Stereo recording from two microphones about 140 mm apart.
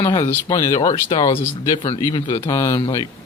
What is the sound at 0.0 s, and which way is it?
Speech, 25° left (ahead or behind).